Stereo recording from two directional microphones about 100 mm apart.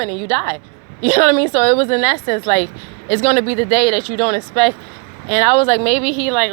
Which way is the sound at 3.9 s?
55° left (ahead or behind).